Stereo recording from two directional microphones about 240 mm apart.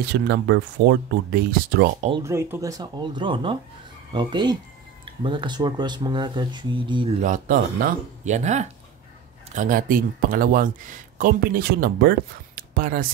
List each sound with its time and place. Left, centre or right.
0.0 s speech: right
2.0 s speech: centre
7.2 s speech: right
12.5 s a sound: right